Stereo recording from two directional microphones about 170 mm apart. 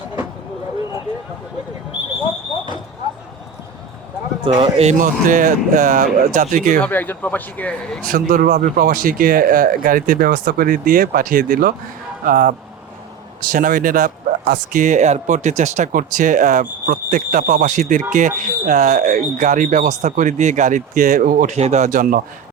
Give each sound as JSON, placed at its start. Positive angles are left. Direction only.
{"t": 4.4, "sound": "a man's voice", "side_deg": -30}
{"t": 6.8, "sound": "speech", "side_deg": 10}
{"t": 8.3, "sound": "a man's voice", "side_deg": -55}